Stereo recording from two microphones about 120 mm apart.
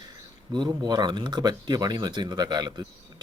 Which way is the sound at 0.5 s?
35° right (ahead or behind).